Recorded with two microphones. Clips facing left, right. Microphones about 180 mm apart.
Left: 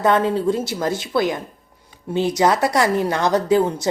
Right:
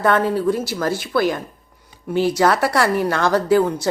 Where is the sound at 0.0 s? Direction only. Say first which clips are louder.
Even; 20° left (ahead or behind).